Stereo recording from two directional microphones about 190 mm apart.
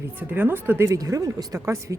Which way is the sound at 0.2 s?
10° right (ahead or behind).